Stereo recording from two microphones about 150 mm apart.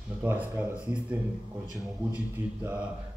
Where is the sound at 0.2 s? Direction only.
15° right (ahead or behind).